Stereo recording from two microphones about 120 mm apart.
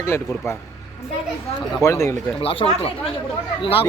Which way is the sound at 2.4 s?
50° left (ahead or behind).